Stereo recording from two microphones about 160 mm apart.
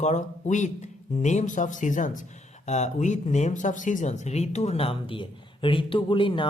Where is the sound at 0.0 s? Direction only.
50° left (ahead or behind).